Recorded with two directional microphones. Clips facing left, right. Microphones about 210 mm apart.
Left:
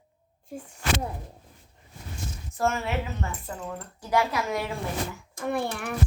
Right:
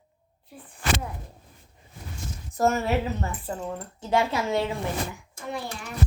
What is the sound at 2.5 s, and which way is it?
Speech, 40° right (ahead or behind).